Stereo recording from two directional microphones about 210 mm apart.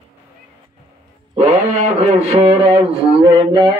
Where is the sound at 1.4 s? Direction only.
30° right (ahead or behind).